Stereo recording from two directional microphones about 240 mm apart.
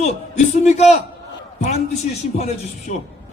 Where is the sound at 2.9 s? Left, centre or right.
Left.